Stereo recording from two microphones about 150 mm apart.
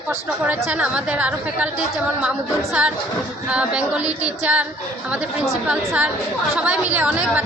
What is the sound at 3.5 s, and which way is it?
Speech, 5° right (ahead or behind).